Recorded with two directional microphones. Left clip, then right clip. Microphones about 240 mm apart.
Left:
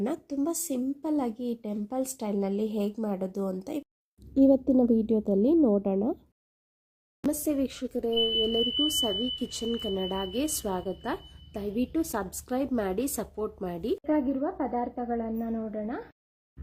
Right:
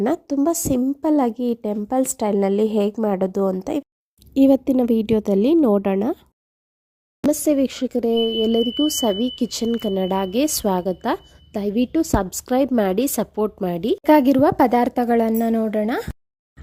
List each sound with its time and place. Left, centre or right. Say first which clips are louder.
0.0 s speech: right 11 dB; right
7.3 s speech: right 10 dB; right
14.0 s speech: right 16 dB; right